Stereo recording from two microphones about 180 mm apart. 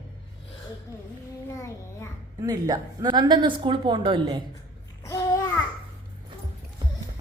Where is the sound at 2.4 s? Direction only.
20° right (ahead or behind).